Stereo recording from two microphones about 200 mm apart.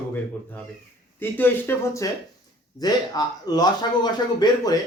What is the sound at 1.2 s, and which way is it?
A man's voice, 10° left (ahead or behind).